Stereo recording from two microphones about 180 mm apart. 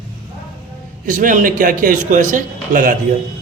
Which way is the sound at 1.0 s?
50° right (ahead or behind).